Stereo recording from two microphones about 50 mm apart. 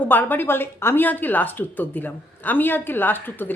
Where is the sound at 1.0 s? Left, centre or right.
Left.